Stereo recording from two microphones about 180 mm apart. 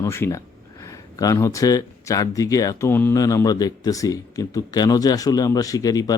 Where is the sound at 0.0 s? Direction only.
15° left (ahead or behind).